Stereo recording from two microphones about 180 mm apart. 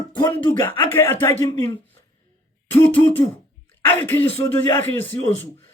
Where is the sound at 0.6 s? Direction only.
10° left (ahead or behind).